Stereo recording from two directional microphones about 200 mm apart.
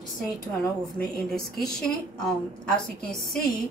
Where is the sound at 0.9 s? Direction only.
Centre (ahead or behind).